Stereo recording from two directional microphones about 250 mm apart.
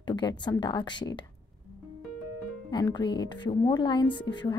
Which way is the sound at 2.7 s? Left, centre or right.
Centre.